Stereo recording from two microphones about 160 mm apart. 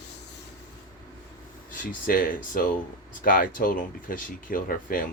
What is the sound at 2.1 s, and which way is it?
Speech, 60° left (ahead or behind).